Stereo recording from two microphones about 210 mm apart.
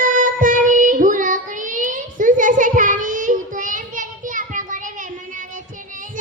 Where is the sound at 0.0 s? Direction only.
40° right (ahead or behind).